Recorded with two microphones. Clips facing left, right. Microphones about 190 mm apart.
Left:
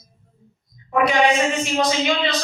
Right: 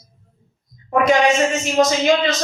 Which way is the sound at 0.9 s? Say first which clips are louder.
Right 2 dB; 45° right (ahead or behind).